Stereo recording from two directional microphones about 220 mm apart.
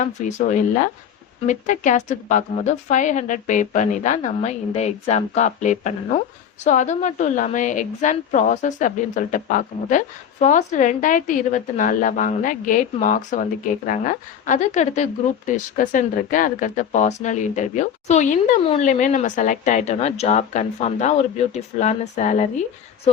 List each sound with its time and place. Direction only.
0.0 s a woman's voice: 35° left (ahead or behind)